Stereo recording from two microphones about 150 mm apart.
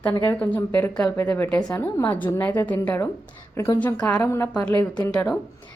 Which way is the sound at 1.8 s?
15° left (ahead or behind).